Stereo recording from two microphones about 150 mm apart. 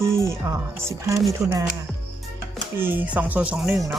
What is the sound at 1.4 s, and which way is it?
Chopping, 20° right (ahead or behind).